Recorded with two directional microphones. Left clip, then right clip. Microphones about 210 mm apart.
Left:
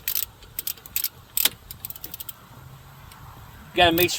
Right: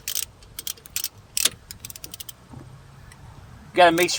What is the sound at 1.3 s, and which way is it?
Keys jangling, 5° left (ahead or behind).